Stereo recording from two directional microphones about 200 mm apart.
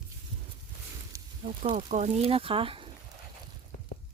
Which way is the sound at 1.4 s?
30° right (ahead or behind).